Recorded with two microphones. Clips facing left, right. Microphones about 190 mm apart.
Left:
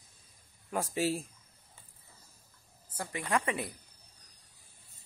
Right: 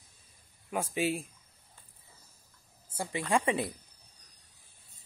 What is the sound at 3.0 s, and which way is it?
Speech, 25° right (ahead or behind).